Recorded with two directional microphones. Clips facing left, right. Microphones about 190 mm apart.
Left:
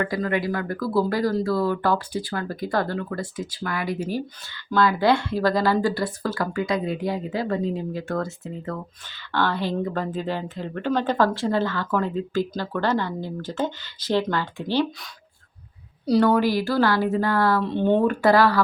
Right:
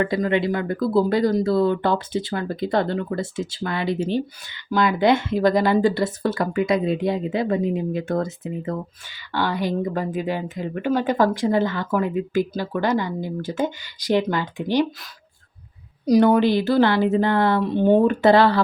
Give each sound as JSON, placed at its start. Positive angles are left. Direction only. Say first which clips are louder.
{"t": 0.0, "sound": "speech", "louder": "right 4 dB", "side_deg": -20}
{"t": 16.0, "sound": "speech", "louder": "right 3 dB", "side_deg": -15}